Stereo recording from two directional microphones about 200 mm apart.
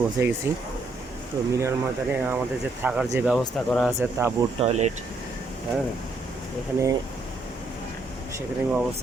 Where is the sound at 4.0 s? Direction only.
10° right (ahead or behind).